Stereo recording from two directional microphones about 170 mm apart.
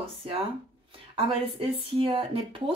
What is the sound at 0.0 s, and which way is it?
Speech, 35° right (ahead or behind).